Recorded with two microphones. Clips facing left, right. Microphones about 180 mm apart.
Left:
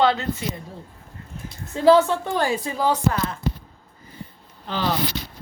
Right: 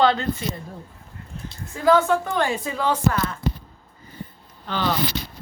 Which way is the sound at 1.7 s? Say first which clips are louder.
Left 2 dB; 30° left (ahead or behind).